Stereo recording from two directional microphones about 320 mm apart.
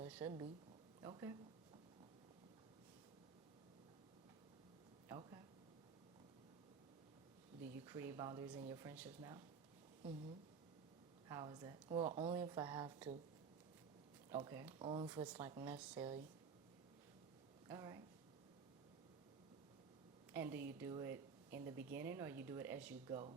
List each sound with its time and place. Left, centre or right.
0.0 s a sound: centre
1.0 s speech: centre
5.0 s a sound: centre
7.9 s speech: centre
14.3 s speech: centre
17.7 s speech: centre
20.3 s a woman's voice: centre